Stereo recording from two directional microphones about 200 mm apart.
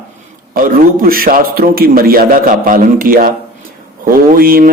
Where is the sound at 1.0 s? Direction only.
45° right (ahead or behind).